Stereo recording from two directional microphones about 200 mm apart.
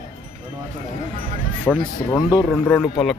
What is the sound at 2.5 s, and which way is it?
Speech, 5° left (ahead or behind).